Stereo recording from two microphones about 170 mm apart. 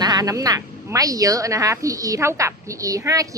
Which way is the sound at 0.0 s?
20° right (ahead or behind).